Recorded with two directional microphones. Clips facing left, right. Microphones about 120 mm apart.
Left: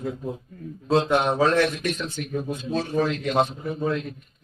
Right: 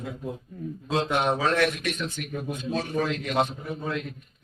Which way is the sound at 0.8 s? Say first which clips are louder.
Left 4 dB; 40° left (ahead or behind).